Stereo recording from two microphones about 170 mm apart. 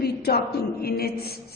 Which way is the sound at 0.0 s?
70° left (ahead or behind).